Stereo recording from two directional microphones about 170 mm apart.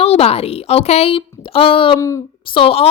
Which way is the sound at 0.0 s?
35° left (ahead or behind).